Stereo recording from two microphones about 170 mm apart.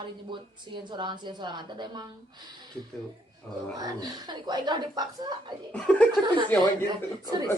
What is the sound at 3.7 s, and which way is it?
A woman's voice, 20° right (ahead or behind).